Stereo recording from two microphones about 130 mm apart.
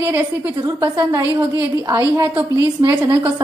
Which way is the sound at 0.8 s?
25° right (ahead or behind).